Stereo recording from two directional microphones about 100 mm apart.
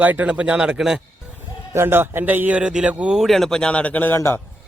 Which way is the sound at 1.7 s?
25° right (ahead or behind).